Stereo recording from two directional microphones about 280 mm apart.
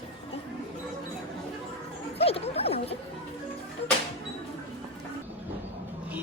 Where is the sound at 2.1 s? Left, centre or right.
Left.